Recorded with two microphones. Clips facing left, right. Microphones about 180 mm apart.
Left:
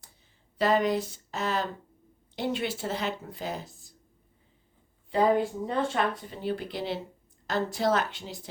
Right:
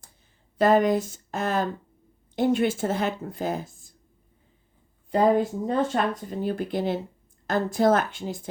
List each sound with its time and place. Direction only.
0.6 s speech: 50° right (ahead or behind)
5.1 s speech: 40° right (ahead or behind)